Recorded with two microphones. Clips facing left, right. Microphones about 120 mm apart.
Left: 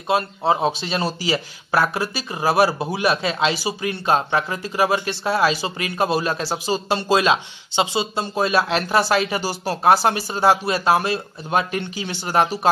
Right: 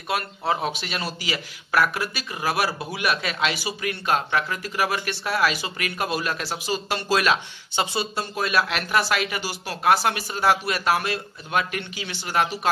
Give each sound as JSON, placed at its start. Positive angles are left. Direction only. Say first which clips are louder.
{"t": 0.1, "sound": "speech", "louder": "left 6 dB", "side_deg": 25}